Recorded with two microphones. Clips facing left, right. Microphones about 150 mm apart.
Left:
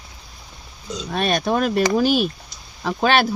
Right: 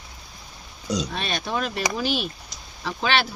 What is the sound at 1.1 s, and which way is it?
Speech, 50° left (ahead or behind).